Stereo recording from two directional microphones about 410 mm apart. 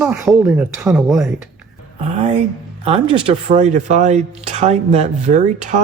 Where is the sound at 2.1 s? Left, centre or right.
Centre.